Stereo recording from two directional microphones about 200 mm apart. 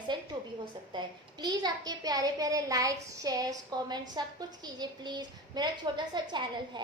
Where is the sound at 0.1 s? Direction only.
20° right (ahead or behind).